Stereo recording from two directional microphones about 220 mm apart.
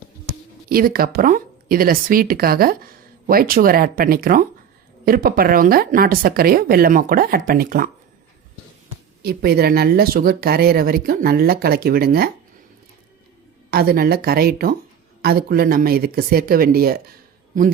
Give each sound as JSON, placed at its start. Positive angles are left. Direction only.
{"t": 0.7, "sound": "speech", "side_deg": -40}
{"t": 9.2, "sound": "speech", "side_deg": -45}
{"t": 13.7, "sound": "speech", "side_deg": -45}